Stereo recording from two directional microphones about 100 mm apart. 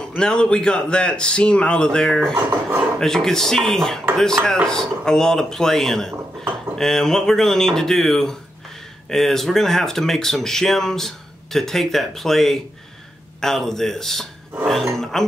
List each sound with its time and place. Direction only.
0.1 s speech: 10° left (ahead or behind)